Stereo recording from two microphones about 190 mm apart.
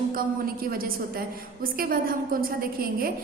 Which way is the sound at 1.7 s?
50° right (ahead or behind).